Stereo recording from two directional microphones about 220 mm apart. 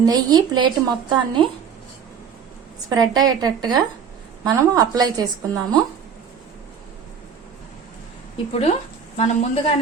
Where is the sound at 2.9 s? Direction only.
15° right (ahead or behind).